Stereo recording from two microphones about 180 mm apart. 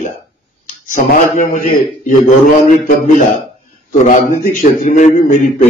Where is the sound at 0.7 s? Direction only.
45° left (ahead or behind).